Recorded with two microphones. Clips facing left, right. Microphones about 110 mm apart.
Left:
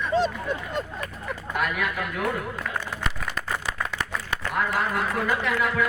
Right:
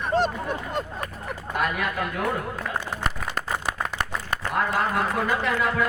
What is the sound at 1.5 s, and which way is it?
Speech, 30° right (ahead or behind).